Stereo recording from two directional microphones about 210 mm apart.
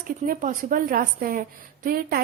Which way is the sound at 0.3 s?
40° right (ahead or behind).